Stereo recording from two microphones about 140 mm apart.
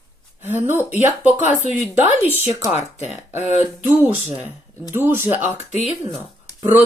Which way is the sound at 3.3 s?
55° left (ahead or behind).